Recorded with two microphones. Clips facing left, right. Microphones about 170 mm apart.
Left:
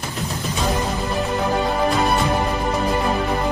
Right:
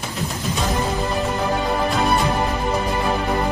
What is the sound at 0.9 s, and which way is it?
Music, centre (ahead or behind).